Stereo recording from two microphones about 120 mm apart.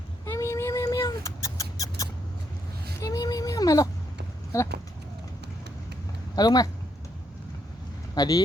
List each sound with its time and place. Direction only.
0.3 s cat: 25° left (ahead or behind)
3.0 s whimper: 30° left (ahead or behind)
4.5 s speech: 25° left (ahead or behind)
6.3 s speech: 35° left (ahead or behind)
8.1 s speech: 35° left (ahead or behind)